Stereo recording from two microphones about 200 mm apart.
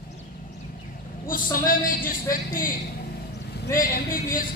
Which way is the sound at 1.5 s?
45° left (ahead or behind).